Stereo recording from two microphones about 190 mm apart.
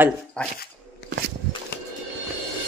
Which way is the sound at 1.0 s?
65° left (ahead or behind).